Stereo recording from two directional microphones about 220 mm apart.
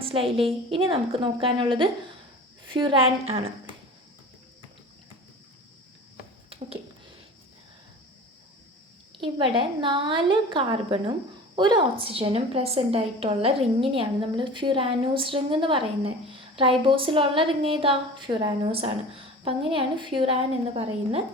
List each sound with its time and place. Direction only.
0.0 s a woman's voice: 25° right (ahead or behind)
9.2 s a woman's voice: 25° right (ahead or behind)